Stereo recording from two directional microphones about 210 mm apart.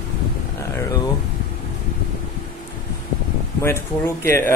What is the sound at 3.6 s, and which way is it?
Speech, 10° left (ahead or behind).